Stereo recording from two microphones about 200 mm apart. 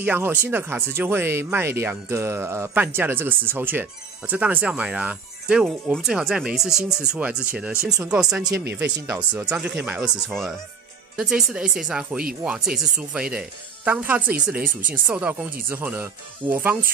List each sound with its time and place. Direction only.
0.0 s speech: 10° right (ahead or behind)
14.6 s speech: 45° right (ahead or behind)
15.0 s speech: 5° right (ahead or behind)